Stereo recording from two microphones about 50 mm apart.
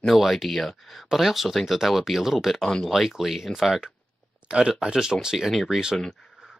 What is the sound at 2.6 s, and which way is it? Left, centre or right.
Speech, centre.